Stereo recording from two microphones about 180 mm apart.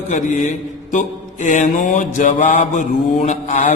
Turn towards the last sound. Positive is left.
turn(degrees=40)  # may be behind; listen again after turning